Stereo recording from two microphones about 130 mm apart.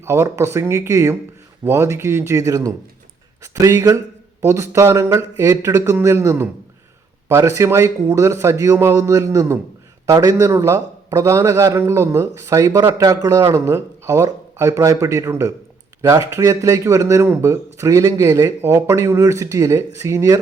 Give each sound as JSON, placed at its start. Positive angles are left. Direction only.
{"t": 0.0, "sound": "a man's voice", "side_deg": -20}